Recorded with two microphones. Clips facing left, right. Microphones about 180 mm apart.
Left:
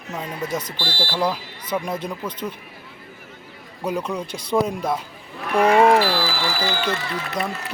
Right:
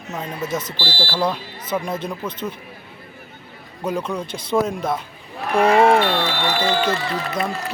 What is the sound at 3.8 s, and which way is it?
Speech, 10° left (ahead or behind).